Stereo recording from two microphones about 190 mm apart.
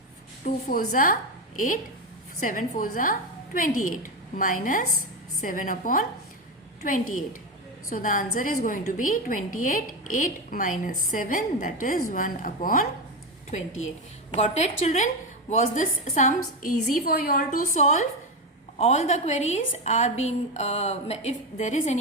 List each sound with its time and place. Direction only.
0.4 s a woman's voice: 45° left (ahead or behind)
7.9 s a woman's voice: 45° left (ahead or behind)
14.4 s a woman's voice: 40° left (ahead or behind)